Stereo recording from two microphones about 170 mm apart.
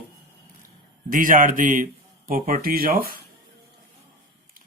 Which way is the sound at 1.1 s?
55° right (ahead or behind).